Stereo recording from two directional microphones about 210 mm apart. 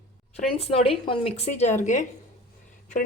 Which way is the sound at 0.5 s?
30° left (ahead or behind).